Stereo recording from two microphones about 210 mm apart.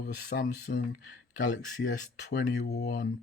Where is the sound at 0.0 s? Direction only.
50° left (ahead or behind).